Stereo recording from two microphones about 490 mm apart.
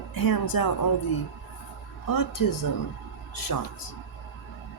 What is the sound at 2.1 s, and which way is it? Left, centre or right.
Speech, left.